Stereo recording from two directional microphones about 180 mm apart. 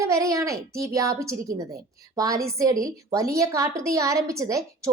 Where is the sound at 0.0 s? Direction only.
15° right (ahead or behind).